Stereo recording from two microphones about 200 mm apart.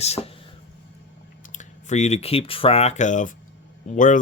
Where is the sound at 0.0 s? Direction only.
35° left (ahead or behind).